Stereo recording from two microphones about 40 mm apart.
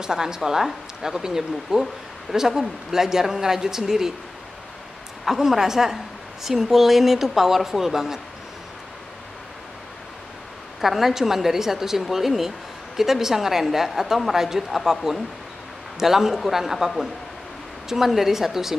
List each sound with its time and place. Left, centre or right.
0.0 s speech: centre
5.2 s speech: centre
10.8 s speech: centre
16.0 s a woman's voice: centre